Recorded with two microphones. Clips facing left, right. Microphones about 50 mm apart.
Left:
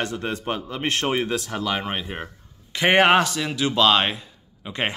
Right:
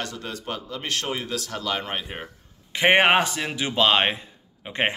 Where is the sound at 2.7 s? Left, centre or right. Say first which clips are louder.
Left 1 dB; right.